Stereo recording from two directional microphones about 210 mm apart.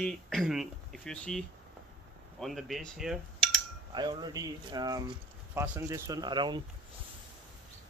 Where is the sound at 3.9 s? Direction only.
20° right (ahead or behind).